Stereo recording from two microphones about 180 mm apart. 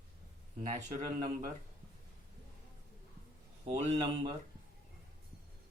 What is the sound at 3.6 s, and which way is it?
Speech, 40° right (ahead or behind).